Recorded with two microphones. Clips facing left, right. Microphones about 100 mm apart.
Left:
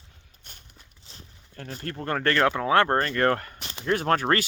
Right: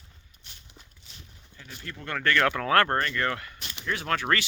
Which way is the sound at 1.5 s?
45° left (ahead or behind).